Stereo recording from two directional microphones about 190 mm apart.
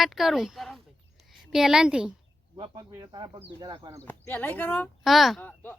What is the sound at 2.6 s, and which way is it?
Speech, 20° right (ahead or behind).